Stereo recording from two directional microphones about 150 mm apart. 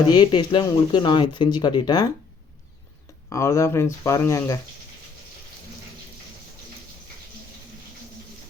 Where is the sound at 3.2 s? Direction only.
20° left (ahead or behind).